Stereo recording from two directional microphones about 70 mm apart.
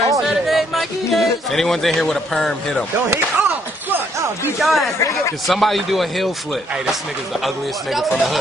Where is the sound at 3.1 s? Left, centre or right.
Right.